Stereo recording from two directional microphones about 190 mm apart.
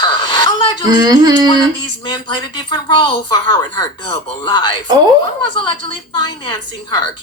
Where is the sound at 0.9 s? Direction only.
20° right (ahead or behind).